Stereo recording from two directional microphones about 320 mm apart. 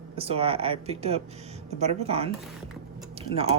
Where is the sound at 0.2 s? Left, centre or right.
Centre.